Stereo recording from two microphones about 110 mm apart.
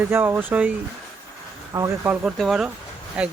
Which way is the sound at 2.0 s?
15° right (ahead or behind).